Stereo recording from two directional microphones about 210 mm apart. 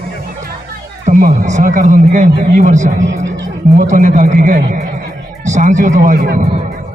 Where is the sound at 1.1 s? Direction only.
40° right (ahead or behind).